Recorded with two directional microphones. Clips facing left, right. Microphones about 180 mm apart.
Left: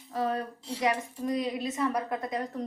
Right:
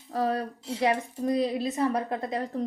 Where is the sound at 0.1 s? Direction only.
40° right (ahead or behind).